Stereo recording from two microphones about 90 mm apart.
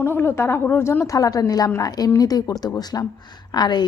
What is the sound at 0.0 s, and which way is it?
A woman's voice, 25° left (ahead or behind).